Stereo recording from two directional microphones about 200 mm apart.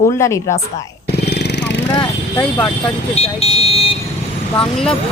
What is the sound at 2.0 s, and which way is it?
Speech, 10° left (ahead or behind).